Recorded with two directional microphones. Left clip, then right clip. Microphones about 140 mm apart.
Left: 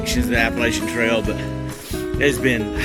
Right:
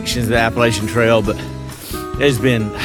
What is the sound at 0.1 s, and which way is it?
Speech, 45° right (ahead or behind).